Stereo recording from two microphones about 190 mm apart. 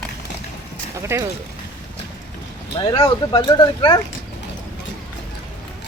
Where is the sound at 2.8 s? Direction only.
25° left (ahead or behind).